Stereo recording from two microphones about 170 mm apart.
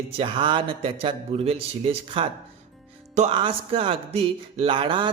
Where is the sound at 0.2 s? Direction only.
30° right (ahead or behind).